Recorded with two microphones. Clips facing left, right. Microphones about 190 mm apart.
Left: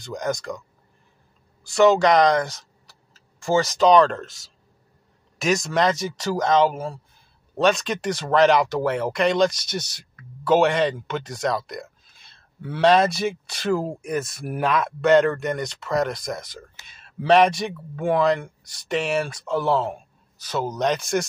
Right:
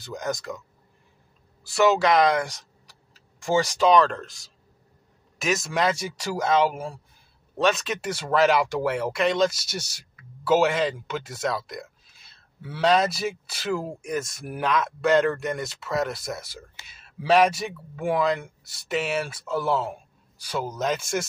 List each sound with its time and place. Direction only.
0.0 s speech: centre (ahead or behind)
1.6 s speech: 5° right (ahead or behind)
7.5 s speech: centre (ahead or behind)